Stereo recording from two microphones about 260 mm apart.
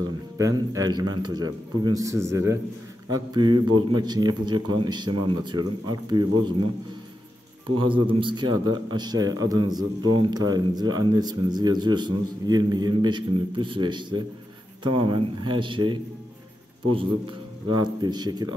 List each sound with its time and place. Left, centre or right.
0.4 s speech: centre
7.8 s a man's voice: centre